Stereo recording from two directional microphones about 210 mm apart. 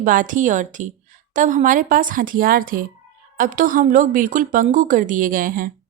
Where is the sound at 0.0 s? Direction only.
40° right (ahead or behind).